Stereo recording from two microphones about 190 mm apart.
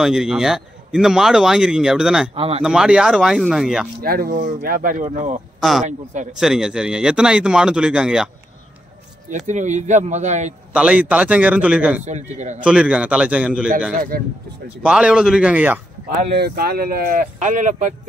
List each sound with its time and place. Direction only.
0.0 s speech: 5° right (ahead or behind)
2.3 s speech: 30° right (ahead or behind)
2.6 s speech: 5° right (ahead or behind)
4.0 s speech: 50° right (ahead or behind)
5.6 s speech: centre (ahead or behind)
9.5 s speech: 40° right (ahead or behind)
10.7 s a man's voice: 5° right (ahead or behind)
12.0 s speech: 40° right (ahead or behind)
12.6 s speech: 5° right (ahead or behind)
13.9 s speech: 50° right (ahead or behind)
14.9 s speech: 5° right (ahead or behind)
16.3 s speech: 55° right (ahead or behind)